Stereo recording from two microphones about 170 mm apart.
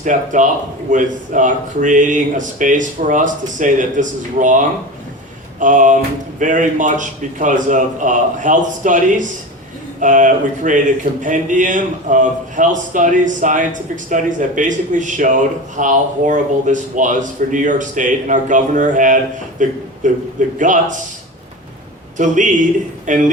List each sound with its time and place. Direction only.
0.0 s speech: 50° right (ahead or behind)
22.2 s speech: 50° right (ahead or behind)